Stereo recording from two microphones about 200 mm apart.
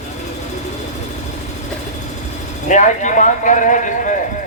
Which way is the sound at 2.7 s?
35° left (ahead or behind).